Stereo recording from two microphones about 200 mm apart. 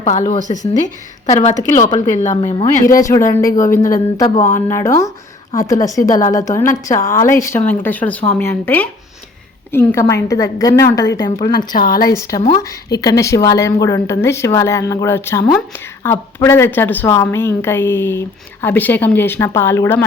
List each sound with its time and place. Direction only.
0.3 s a woman's voice: 40° left (ahead or behind)
3.0 s a woman's voice: 15° left (ahead or behind)